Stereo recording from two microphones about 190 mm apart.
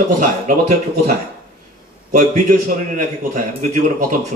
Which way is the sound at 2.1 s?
45° right (ahead or behind).